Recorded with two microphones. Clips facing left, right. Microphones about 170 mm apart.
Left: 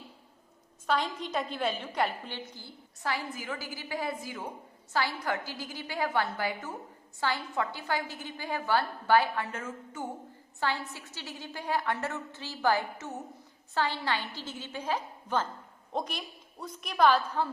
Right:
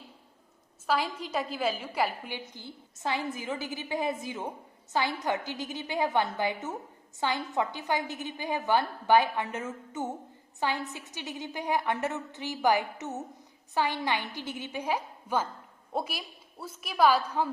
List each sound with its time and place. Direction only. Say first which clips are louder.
0.9 s a woman's voice: right 1 dB; 5° right (ahead or behind)